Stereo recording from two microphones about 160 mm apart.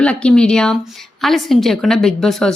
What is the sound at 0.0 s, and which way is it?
A woman's voice, 5° left (ahead or behind).